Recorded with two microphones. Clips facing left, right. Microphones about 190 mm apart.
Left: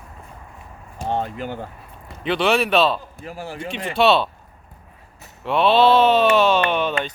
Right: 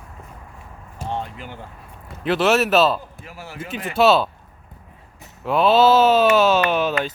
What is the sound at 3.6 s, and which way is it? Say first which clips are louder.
Speech: right 1 dB; centre (ahead or behind).